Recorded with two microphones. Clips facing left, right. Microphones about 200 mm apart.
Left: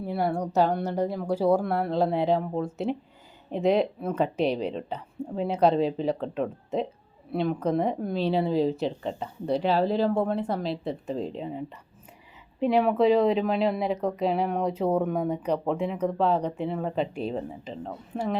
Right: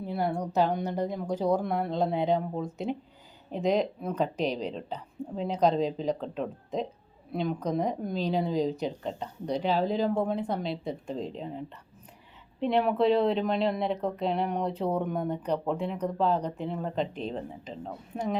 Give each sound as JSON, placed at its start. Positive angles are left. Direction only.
{"t": 0.0, "sound": "a woman's voice", "side_deg": 5}